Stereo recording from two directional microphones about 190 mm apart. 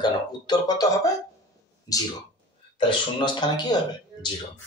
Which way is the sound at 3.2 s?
25° left (ahead or behind).